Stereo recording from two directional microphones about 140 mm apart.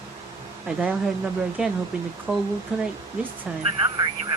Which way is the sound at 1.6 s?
5° right (ahead or behind).